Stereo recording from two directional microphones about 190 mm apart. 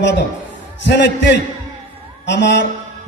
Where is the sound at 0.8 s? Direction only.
65° left (ahead or behind).